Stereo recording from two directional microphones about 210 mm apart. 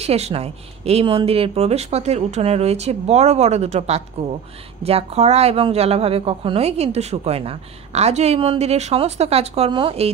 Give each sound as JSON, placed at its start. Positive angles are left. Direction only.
{"t": 0.0, "sound": "speech", "side_deg": -30}